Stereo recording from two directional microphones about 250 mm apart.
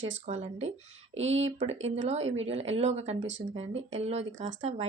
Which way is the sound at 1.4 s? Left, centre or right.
Right.